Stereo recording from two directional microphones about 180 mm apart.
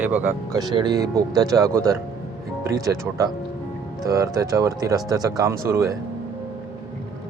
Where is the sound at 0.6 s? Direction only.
25° right (ahead or behind).